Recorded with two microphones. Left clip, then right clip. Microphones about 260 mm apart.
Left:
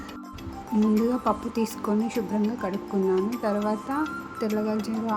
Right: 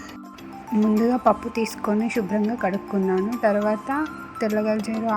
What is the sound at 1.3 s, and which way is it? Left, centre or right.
Music, centre.